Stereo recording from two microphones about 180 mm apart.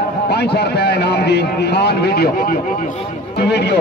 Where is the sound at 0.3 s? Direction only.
65° left (ahead or behind).